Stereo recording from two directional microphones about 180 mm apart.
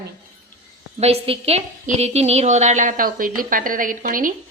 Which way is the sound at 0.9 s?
35° right (ahead or behind).